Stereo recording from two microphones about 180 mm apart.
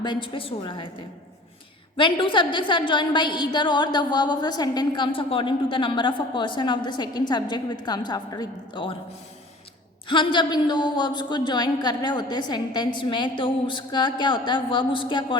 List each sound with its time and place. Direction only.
0.0 s a woman's voice: 25° left (ahead or behind)
2.0 s a woman's voice: 25° left (ahead or behind)
10.1 s a woman's voice: 25° left (ahead or behind)